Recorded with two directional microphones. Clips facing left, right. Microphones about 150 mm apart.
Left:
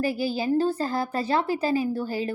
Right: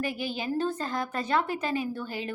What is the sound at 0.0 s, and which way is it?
A woman's voice, 35° left (ahead or behind).